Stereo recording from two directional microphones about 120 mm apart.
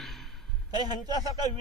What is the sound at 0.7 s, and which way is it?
Speech, 35° right (ahead or behind).